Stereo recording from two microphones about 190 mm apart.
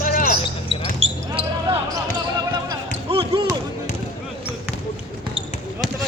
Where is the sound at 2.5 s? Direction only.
25° right (ahead or behind).